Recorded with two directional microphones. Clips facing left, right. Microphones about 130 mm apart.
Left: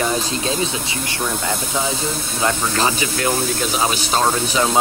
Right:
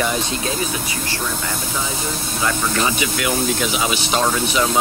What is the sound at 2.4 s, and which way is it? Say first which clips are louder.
Speech: left 1 dB; 35° left (ahead or behind).